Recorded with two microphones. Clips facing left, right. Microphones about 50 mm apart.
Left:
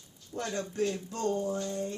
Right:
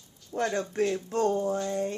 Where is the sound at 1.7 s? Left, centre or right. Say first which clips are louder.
Right 5 dB; right.